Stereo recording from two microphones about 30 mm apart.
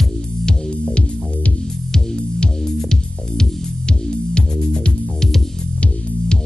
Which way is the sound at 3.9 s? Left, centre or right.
Left.